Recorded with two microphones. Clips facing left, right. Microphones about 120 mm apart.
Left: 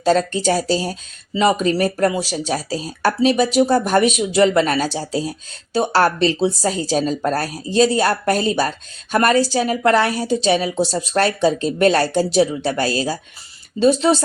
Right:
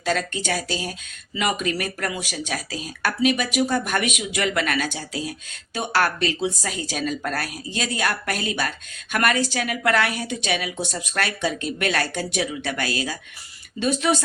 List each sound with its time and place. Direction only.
0.0 s speech: 35° left (ahead or behind)